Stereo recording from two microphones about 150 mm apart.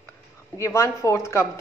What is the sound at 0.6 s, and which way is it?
Speech, 20° left (ahead or behind).